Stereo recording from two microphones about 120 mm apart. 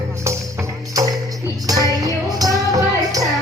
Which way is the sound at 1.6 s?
30° right (ahead or behind).